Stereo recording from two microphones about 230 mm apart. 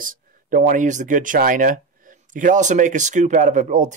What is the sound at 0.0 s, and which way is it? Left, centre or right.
Speech, right.